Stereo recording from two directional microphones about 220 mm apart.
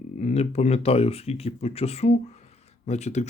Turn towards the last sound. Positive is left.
turn(degrees=30)  # may be behind; listen again after turning